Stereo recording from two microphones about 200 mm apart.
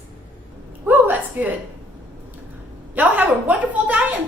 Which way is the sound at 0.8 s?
10° right (ahead or behind).